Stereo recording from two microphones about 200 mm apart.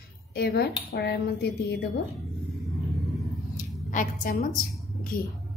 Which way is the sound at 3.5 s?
40° left (ahead or behind).